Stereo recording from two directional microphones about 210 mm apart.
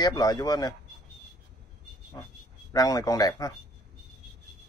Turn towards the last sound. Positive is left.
turn(degrees=15)  # may be behind; listen again after turning